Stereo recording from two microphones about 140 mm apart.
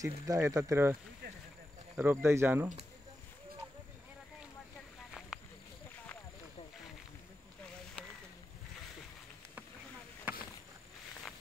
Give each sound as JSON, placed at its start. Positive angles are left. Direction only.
{"t": 0.0, "sound": "speech", "side_deg": -20}
{"t": 2.0, "sound": "speech", "side_deg": -15}
{"t": 10.3, "sound": "insect", "side_deg": -10}